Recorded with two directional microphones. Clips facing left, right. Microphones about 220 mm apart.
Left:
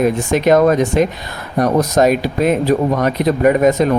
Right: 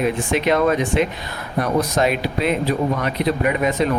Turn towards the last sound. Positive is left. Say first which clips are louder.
# left 7 dB
turn(degrees=45)  # may be behind; listen again after turning